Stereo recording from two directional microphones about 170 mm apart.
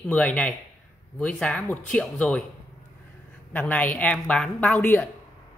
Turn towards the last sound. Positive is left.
turn(degrees=5)  # may be behind; listen again after turning